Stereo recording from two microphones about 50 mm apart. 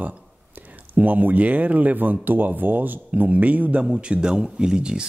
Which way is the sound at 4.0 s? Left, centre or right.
Centre.